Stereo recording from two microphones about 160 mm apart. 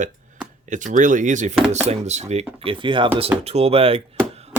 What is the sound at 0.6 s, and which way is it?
Speech, 50° right (ahead or behind).